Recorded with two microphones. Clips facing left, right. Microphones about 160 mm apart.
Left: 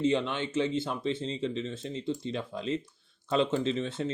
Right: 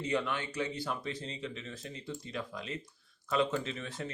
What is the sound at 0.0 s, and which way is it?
Speech, 25° left (ahead or behind).